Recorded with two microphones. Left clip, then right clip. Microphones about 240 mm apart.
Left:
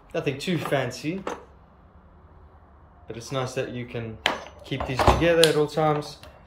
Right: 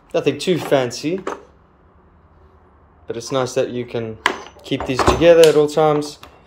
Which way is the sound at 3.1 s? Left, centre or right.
Right.